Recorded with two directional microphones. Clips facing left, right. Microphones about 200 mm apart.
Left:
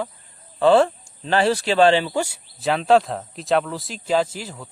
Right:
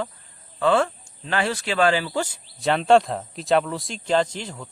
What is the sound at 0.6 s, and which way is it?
Speech, 30° left (ahead or behind).